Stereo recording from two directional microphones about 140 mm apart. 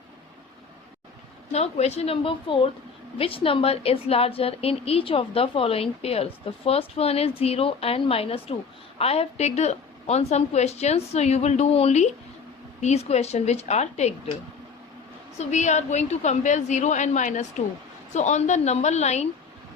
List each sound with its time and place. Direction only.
1.5 s a woman's voice: 50° left (ahead or behind)
15.4 s a woman's voice: 55° left (ahead or behind)